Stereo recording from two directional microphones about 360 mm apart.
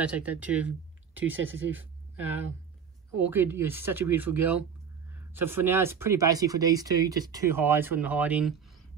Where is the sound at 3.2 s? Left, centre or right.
Centre.